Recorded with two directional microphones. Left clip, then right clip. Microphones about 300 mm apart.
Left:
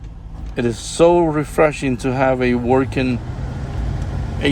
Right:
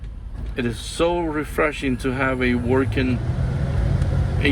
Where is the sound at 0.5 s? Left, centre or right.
Centre.